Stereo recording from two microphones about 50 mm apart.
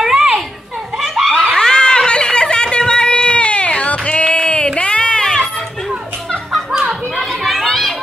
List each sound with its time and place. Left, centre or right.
0.0 s children playing: centre
0.9 s screaming: centre
1.3 s a sound: centre
6.9 s children playing: centre